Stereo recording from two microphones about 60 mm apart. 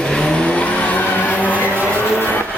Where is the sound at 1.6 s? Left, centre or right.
Right.